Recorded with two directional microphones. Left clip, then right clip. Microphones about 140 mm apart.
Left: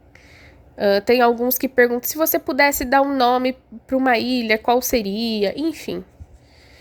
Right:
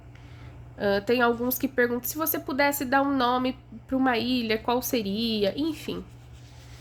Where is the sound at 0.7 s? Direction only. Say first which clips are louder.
Left 8 dB; 55° left (ahead or behind).